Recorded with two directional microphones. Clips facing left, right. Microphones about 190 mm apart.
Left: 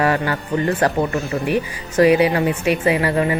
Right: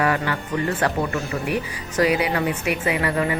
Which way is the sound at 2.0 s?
30° left (ahead or behind).